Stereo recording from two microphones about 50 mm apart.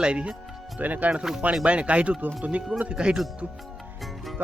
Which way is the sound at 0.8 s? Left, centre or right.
Right.